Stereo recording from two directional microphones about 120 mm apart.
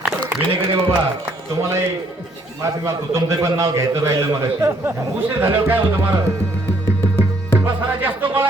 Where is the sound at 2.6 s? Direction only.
25° right (ahead or behind).